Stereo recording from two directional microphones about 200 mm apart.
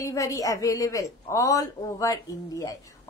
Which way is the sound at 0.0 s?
15° left (ahead or behind).